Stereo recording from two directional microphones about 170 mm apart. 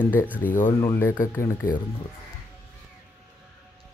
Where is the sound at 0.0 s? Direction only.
10° left (ahead or behind).